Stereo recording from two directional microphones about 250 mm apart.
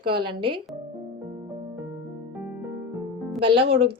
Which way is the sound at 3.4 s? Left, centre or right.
Right.